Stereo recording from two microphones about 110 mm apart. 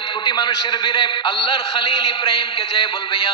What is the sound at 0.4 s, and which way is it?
A man's voice, 45° left (ahead or behind).